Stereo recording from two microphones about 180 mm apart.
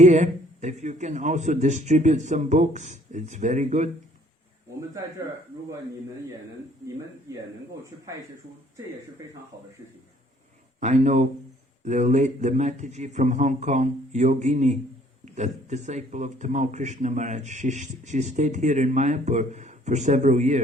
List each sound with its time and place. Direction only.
0.0 s speech: 40° right (ahead or behind)
10.8 s speech: 40° right (ahead or behind)